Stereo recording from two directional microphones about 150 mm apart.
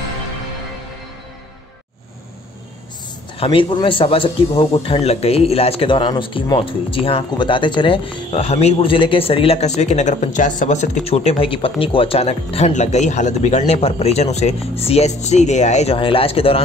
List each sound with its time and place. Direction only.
3.3 s speech: 40° left (ahead or behind); by 10.9 s 55° left (ahead or behind)
11.1 s speech: 40° left (ahead or behind)